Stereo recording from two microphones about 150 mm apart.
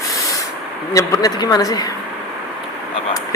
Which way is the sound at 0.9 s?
25° left (ahead or behind).